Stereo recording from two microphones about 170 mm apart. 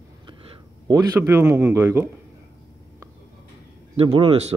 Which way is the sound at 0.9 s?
20° right (ahead or behind).